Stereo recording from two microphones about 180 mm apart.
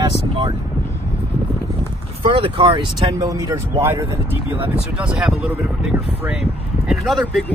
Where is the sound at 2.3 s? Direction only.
30° right (ahead or behind).